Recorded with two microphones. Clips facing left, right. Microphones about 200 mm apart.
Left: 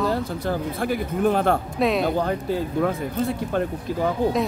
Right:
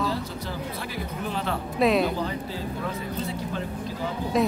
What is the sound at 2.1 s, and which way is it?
Speech, 55° left (ahead or behind).